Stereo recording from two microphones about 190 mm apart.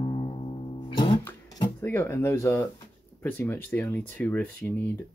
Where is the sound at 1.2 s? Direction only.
20° left (ahead or behind).